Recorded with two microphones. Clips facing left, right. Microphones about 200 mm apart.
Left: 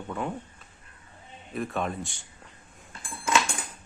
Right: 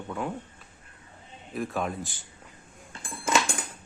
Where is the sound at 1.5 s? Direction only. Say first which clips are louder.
Even; centre (ahead or behind).